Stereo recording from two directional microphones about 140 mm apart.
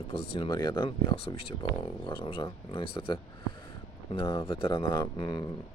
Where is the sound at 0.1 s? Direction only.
35° left (ahead or behind).